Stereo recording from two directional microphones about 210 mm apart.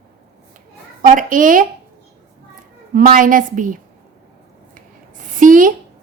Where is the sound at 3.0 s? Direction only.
40° right (ahead or behind).